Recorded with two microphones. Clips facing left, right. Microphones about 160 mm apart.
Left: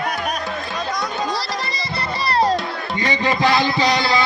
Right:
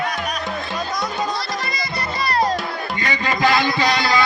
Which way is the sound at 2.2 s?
30° left (ahead or behind).